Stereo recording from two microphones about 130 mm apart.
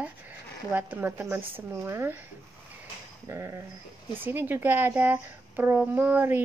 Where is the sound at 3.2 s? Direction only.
20° right (ahead or behind).